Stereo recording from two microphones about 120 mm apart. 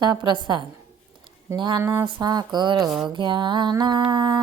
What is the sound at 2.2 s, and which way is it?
Music, 35° right (ahead or behind).